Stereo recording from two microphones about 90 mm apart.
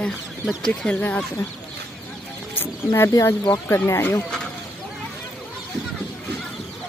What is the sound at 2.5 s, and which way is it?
Wild animals, 25° left (ahead or behind).